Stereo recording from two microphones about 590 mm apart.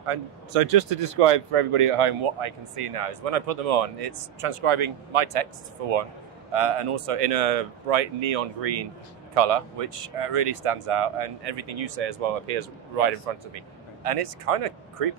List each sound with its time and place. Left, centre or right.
0.0 s speech: right
14.0 s speech: right